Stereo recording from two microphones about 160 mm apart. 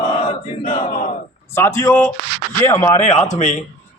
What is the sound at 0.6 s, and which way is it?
Crowd, 60° left (ahead or behind).